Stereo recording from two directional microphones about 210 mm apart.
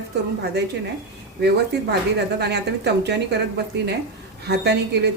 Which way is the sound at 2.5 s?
55° right (ahead or behind).